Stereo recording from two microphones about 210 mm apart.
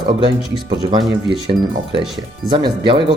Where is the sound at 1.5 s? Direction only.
30° right (ahead or behind).